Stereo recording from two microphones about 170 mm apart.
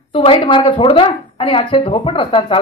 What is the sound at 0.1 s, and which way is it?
Speech, 30° left (ahead or behind).